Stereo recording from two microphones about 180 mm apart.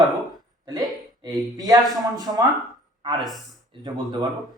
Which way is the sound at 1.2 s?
20° right (ahead or behind).